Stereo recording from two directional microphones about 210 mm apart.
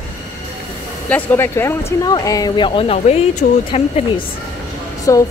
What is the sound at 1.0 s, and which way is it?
Speech, 10° left (ahead or behind).